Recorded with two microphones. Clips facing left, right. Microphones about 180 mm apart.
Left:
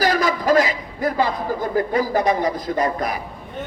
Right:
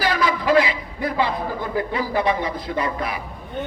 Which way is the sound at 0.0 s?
40° left (ahead or behind).